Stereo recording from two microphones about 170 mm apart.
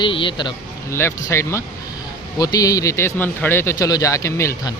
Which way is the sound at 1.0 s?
15° left (ahead or behind).